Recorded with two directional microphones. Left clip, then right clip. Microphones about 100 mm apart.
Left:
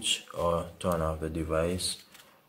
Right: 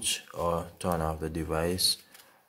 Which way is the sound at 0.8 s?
50° right (ahead or behind).